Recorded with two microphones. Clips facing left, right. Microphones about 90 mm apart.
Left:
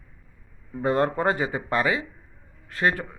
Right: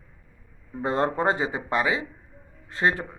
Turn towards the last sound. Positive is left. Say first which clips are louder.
# even
turn(degrees=-25)  # may be behind; listen again after turning